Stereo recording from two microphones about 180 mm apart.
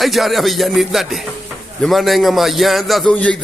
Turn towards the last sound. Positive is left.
turn(degrees=5)  # may be behind; listen again after turning